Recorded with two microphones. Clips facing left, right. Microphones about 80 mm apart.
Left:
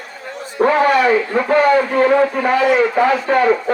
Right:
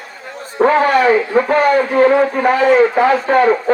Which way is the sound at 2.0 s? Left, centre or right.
Right.